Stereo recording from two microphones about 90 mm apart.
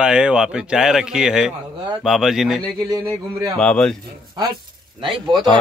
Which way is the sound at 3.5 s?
10° left (ahead or behind).